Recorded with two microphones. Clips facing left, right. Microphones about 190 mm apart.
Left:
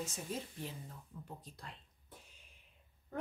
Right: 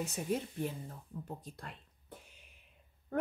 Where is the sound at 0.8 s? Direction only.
45° right (ahead or behind).